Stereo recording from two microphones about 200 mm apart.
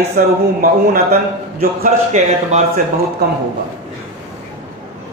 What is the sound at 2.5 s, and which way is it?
Speech, 40° right (ahead or behind).